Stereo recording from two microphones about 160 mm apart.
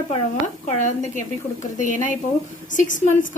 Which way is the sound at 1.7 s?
55° left (ahead or behind).